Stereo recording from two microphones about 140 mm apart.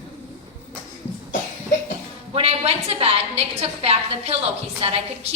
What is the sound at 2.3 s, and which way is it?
A woman's voice, 45° right (ahead or behind).